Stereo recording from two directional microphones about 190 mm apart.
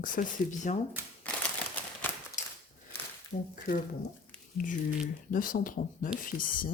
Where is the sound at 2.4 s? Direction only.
40° left (ahead or behind).